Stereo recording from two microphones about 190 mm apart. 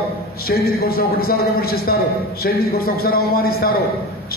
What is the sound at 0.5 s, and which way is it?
A man's voice, 50° left (ahead or behind).